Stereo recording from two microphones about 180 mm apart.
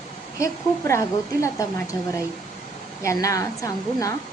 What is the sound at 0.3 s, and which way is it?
A woman's voice, 15° left (ahead or behind).